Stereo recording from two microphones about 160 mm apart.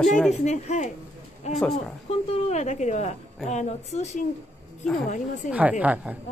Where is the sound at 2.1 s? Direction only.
40° left (ahead or behind).